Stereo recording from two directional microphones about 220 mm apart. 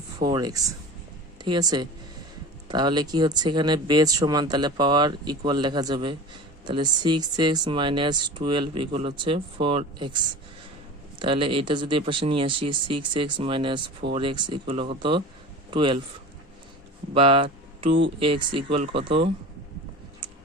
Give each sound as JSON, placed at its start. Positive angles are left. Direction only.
{"t": 0.3, "sound": "speech", "side_deg": -20}
{"t": 11.2, "sound": "speech", "side_deg": -25}
{"t": 17.2, "sound": "speech", "side_deg": -25}